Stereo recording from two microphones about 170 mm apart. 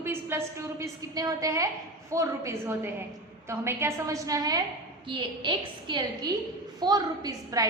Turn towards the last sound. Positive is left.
turn(degrees=-20)  # may be behind; listen again after turning